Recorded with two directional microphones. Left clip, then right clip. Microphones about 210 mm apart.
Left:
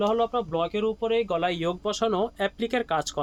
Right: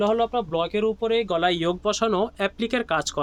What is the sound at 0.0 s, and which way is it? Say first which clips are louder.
Speech: right 2 dB; 35° right (ahead or behind).